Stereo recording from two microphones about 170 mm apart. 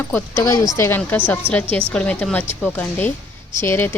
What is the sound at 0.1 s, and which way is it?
A woman's voice, 15° left (ahead or behind).